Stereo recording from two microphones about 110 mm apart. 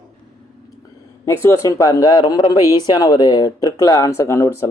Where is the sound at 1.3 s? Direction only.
30° left (ahead or behind).